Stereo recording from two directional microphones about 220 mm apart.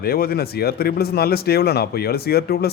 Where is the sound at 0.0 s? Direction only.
45° left (ahead or behind).